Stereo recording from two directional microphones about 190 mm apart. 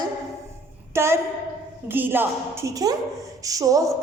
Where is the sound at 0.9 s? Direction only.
15° right (ahead or behind).